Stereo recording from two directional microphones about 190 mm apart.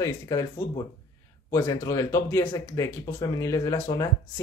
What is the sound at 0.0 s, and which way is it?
Speech, 15° left (ahead or behind).